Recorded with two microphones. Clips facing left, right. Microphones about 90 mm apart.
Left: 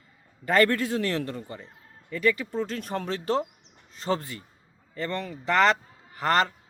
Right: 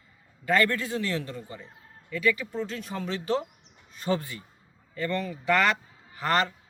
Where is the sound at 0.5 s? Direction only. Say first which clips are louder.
Left 3 dB; 45° left (ahead or behind).